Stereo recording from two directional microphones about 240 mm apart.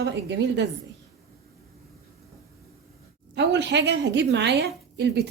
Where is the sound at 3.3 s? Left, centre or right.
Right.